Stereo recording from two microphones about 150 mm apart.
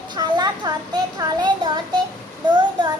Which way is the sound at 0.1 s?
30° right (ahead or behind).